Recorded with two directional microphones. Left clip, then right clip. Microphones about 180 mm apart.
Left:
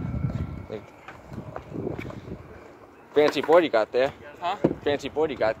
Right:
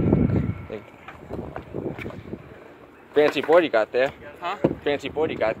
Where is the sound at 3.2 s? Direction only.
5° left (ahead or behind).